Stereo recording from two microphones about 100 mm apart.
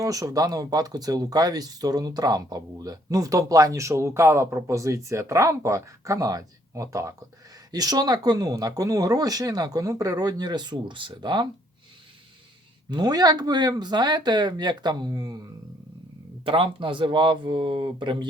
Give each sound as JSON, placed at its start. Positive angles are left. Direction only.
{"t": 0.0, "sound": "speech", "side_deg": -35}
{"t": 12.9, "sound": "speech", "side_deg": -45}
{"t": 16.5, "sound": "speech", "side_deg": -60}